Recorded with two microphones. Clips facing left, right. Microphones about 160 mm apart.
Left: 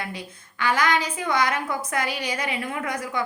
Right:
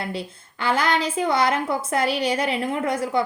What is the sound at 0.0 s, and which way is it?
A woman's voice, 30° right (ahead or behind).